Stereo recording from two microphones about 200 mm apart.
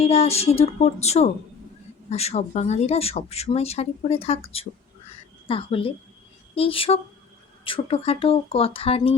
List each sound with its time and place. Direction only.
0.0 s speech: 30° left (ahead or behind)